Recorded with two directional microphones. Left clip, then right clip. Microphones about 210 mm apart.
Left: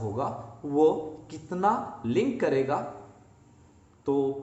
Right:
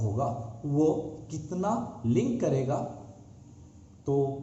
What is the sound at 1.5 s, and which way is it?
A man's voice, 20° left (ahead or behind).